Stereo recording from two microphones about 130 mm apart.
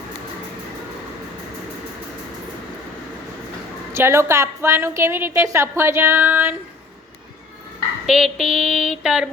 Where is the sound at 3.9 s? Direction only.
20° right (ahead or behind).